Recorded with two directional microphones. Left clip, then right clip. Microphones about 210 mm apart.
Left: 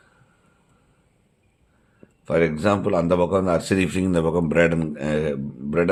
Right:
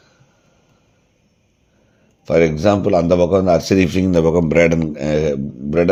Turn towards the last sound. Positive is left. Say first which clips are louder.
# right 5 dB
turn(degrees=-15)  # may be behind; listen again after turning